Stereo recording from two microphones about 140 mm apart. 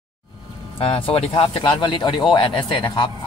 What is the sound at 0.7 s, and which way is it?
A man's voice, 40° left (ahead or behind).